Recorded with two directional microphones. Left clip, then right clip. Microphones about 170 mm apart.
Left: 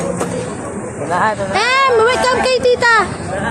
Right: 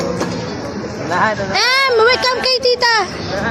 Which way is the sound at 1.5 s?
45° right (ahead or behind).